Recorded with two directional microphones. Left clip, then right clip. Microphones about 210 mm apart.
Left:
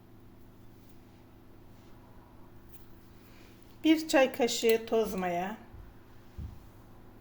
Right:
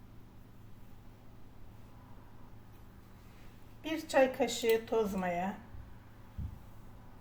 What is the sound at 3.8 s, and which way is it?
A woman's voice, 50° left (ahead or behind).